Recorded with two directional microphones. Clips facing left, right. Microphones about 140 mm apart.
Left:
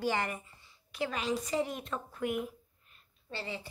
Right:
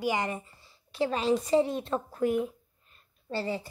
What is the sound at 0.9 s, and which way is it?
Speech, 30° right (ahead or behind).